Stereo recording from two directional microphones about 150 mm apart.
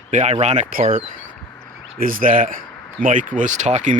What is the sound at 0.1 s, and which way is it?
Speech, 50° right (ahead or behind).